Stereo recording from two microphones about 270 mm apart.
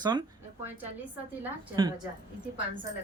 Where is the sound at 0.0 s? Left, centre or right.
Centre.